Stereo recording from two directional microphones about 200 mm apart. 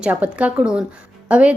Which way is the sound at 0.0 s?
5° right (ahead or behind).